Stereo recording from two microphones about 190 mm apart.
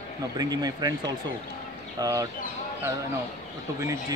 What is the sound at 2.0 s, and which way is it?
Speech, 20° right (ahead or behind).